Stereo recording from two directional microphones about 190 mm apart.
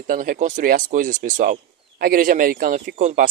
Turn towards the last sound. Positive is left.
turn(degrees=-45)  # may be behind; listen again after turning